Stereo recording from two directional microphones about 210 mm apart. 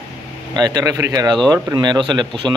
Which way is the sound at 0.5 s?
20° right (ahead or behind).